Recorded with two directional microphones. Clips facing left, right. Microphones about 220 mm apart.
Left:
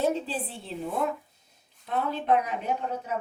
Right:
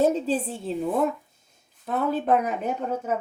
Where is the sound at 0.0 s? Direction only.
40° right (ahead or behind).